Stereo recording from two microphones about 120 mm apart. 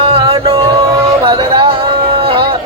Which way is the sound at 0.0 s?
50° right (ahead or behind).